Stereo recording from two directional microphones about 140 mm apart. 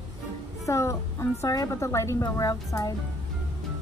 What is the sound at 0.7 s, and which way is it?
A woman's voice, 20° left (ahead or behind).